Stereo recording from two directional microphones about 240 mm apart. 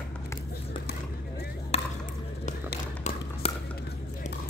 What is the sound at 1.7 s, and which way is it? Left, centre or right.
Chop, left.